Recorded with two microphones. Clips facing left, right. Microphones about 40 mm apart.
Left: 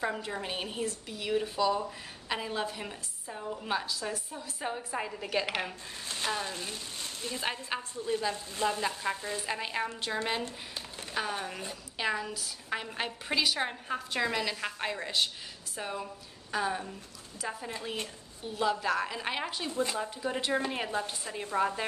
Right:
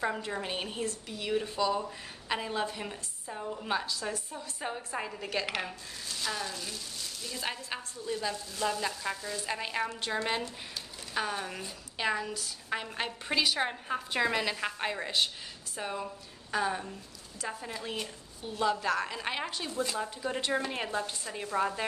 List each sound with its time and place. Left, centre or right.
0.0 s a woman's voice: centre
6.0 s speech: left
9.5 s a woman's voice: centre
19.7 s speech: centre
20.0 s a woman's voice: centre